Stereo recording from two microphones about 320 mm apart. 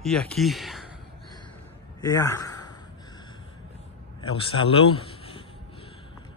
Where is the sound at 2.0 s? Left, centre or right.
Centre.